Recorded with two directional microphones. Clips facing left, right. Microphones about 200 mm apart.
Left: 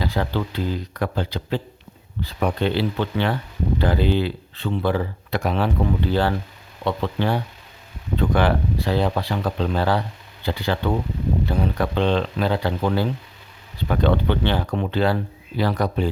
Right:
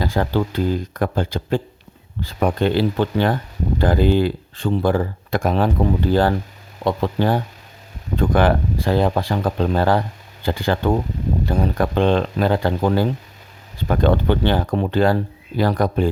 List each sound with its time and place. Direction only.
0.0 s speech: 45° right (ahead or behind)